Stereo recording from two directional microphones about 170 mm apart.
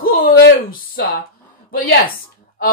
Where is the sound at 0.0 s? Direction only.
60° left (ahead or behind).